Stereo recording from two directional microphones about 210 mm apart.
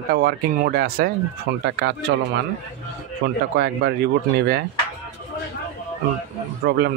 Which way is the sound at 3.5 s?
50° right (ahead or behind).